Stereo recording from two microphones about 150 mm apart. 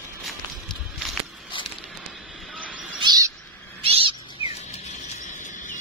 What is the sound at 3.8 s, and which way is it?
Cat, 40° right (ahead or behind).